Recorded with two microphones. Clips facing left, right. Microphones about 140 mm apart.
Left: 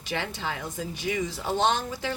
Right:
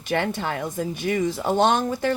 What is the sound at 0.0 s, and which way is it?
Speech, 50° right (ahead or behind).